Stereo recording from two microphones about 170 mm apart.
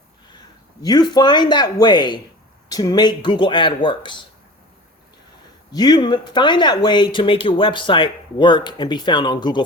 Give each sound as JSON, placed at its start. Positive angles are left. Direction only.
{"t": 0.3, "sound": "a man's voice", "side_deg": 25}
{"t": 5.7, "sound": "speech", "side_deg": 25}